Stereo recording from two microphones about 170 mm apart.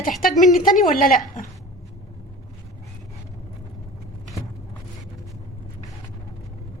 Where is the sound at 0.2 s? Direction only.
50° left (ahead or behind).